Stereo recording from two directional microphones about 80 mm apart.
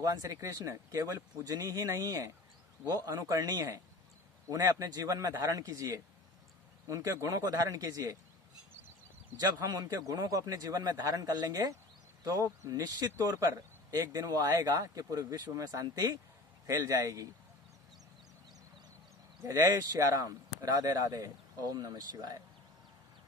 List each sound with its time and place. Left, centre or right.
0.0 s a man's voice: right
9.4 s a man's voice: right
19.4 s speech: right